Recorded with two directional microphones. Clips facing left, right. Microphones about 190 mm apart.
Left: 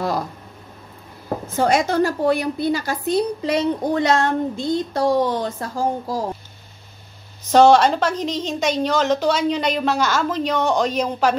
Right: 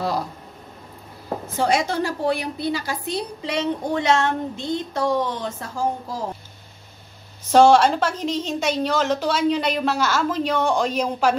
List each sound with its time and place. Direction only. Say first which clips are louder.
1.6 s a woman's voice: left 4 dB; 45° left (ahead or behind)
7.5 s a woman's voice: left 1 dB; 5° right (ahead or behind)